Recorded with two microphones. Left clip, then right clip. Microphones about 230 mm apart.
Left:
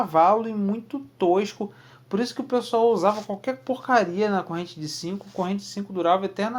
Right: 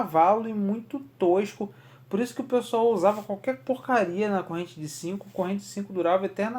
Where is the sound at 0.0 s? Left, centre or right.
Left.